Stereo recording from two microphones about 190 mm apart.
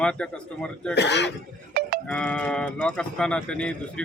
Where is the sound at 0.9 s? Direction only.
65° left (ahead or behind).